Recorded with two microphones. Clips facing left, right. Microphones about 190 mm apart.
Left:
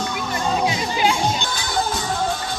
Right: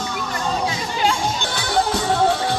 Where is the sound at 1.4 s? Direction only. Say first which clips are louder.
Right 3 dB; 65° right (ahead or behind).